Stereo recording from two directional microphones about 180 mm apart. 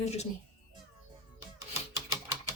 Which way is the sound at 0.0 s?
35° left (ahead or behind).